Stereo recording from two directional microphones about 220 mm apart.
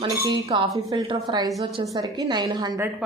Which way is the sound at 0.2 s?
15° right (ahead or behind).